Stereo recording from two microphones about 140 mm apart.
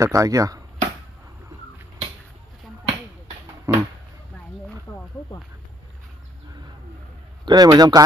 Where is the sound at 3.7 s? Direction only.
20° right (ahead or behind).